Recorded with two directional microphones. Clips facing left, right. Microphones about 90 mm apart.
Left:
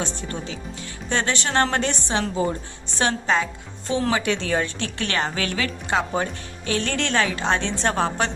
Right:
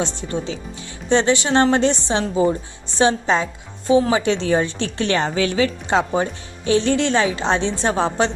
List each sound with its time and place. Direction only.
0.3 s a woman's voice: 25° right (ahead or behind)
4.1 s a woman's voice: 25° right (ahead or behind)